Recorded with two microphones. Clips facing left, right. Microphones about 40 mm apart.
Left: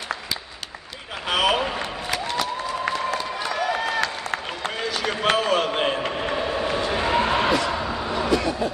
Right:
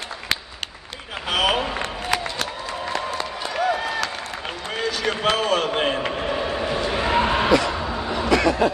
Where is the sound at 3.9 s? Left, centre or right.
Left.